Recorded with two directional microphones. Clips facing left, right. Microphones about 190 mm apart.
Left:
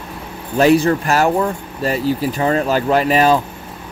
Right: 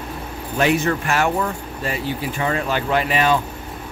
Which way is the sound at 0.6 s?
35° left (ahead or behind).